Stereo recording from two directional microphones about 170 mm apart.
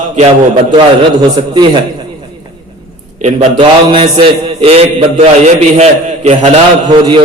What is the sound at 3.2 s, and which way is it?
A man's voice, 30° right (ahead or behind).